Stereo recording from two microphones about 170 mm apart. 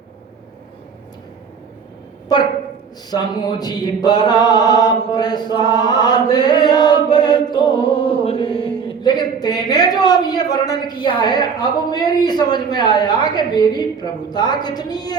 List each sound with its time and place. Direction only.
3.1 s chant: 25° left (ahead or behind)